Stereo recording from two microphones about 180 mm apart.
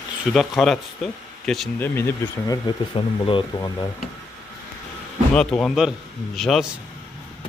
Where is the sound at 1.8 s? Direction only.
15° left (ahead or behind).